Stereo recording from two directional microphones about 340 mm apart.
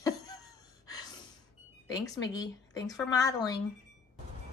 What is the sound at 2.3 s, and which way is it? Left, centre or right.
A woman's voice, centre.